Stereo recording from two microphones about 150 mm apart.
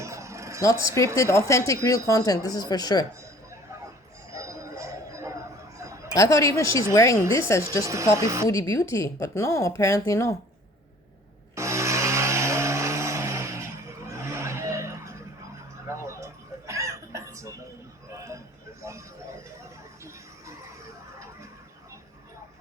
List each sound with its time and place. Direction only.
0.0 s vehicle: 20° right (ahead or behind)
0.6 s speech: 20° left (ahead or behind)
4.3 s a sound: 20° right (ahead or behind)
6.1 s speech: 20° left (ahead or behind)
7.9 s speech: 20° right (ahead or behind)
8.4 s speech: 20° left (ahead or behind)
11.5 s vehicle: 20° right (ahead or behind)
15.9 s a sound: 20° right (ahead or behind)